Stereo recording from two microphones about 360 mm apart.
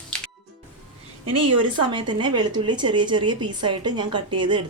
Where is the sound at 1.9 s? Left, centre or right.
Centre.